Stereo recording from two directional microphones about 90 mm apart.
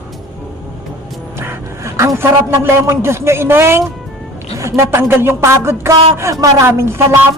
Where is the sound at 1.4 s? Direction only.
30° right (ahead or behind).